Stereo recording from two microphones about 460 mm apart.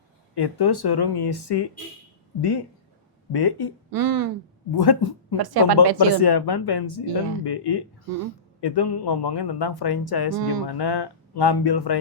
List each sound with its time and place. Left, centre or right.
0.3 s speech: left
3.9 s speech: right
4.8 s speech: left
5.4 s speech: right
6.2 s speech: left